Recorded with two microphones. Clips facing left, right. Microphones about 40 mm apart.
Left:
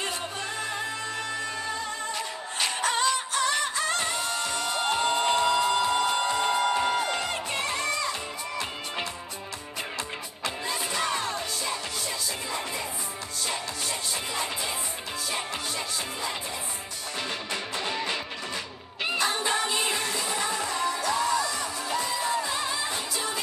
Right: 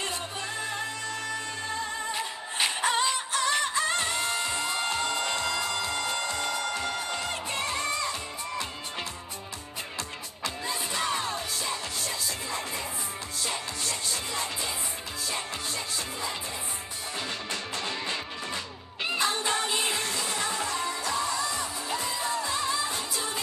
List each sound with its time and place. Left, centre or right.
2.1 s music: centre
4.8 s music: left
10.9 s music: centre
13.8 s music: centre
17.5 s music: centre
19.2 s music: centre
21.5 s music: centre
21.9 s music: centre